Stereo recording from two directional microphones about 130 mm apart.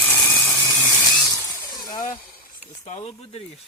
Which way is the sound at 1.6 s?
30° left (ahead or behind).